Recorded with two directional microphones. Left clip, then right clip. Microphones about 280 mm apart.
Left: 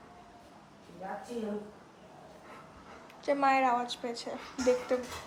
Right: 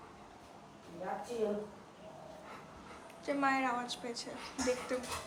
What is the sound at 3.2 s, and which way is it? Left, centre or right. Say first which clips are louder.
A woman's voice: left 6 dB; centre.